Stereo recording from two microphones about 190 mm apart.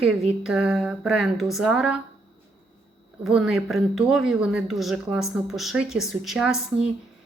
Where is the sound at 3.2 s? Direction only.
5° right (ahead or behind).